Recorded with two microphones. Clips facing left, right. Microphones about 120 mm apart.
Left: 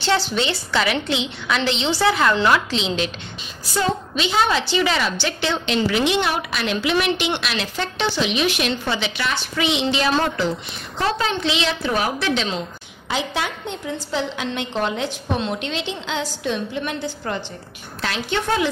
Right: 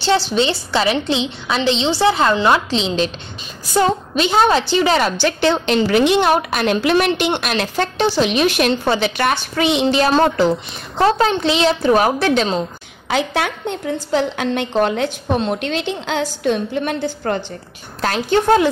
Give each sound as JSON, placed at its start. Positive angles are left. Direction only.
{"t": 0.0, "sound": "a woman's voice", "side_deg": -25}
{"t": 3.7, "sound": "a woman's voice", "side_deg": -50}
{"t": 13.1, "sound": "a woman's voice", "side_deg": -55}